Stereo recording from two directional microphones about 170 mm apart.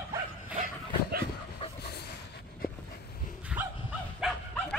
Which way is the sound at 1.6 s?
30° left (ahead or behind).